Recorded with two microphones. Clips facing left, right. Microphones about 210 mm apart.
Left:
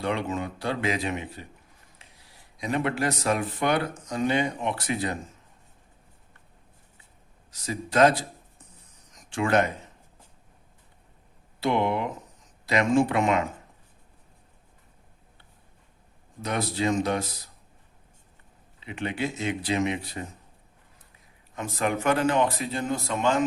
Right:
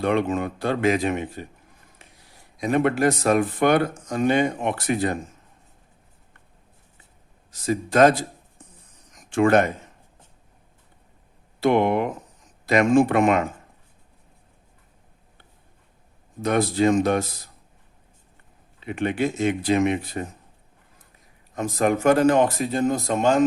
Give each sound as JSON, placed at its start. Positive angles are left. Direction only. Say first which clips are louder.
{"t": 0.0, "sound": "speech", "louder": "right 6 dB", "side_deg": -55}
{"t": 2.6, "sound": "speech", "louder": "right 7 dB", "side_deg": -50}
{"t": 7.5, "sound": "speech", "louder": "right 5 dB", "side_deg": -50}
{"t": 9.3, "sound": "speech", "louder": "right 6 dB", "side_deg": -55}
{"t": 11.6, "sound": "speech", "louder": "right 6 dB", "side_deg": -50}
{"t": 16.4, "sound": "speech", "louder": "right 7 dB", "side_deg": -50}
{"t": 18.8, "sound": "speech", "louder": "right 6 dB", "side_deg": -50}
{"t": 21.5, "sound": "speech", "louder": "right 6 dB", "side_deg": -40}